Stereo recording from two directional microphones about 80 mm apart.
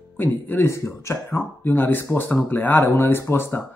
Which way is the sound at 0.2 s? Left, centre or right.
Left.